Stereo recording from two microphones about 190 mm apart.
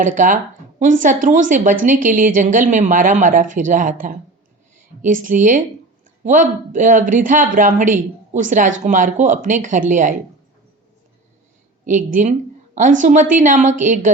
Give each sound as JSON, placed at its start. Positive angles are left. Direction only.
{"t": 0.0, "sound": "a woman's voice", "side_deg": -40}
{"t": 5.0, "sound": "a woman's voice", "side_deg": -45}
{"t": 11.9, "sound": "a woman's voice", "side_deg": -40}